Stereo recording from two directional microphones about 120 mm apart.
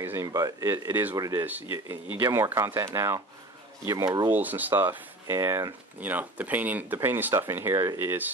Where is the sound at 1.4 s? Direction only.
15° right (ahead or behind); by 4.3 s 30° right (ahead or behind).